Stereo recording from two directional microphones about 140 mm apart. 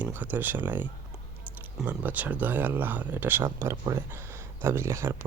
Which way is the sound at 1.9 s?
10° right (ahead or behind).